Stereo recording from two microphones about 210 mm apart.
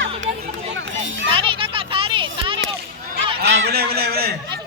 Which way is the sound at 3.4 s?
55° right (ahead or behind).